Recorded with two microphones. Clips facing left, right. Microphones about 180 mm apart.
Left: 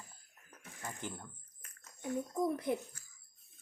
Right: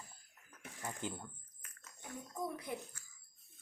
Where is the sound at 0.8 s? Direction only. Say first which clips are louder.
Right 1 dB; 10° right (ahead or behind).